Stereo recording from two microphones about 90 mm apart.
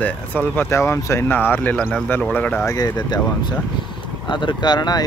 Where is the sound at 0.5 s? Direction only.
30° left (ahead or behind).